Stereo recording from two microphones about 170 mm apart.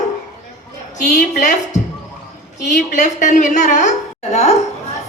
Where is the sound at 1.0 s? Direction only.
50° left (ahead or behind).